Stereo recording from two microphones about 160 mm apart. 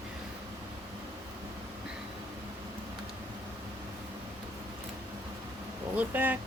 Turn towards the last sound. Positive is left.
turn(degrees=-10)  # may be behind; listen again after turning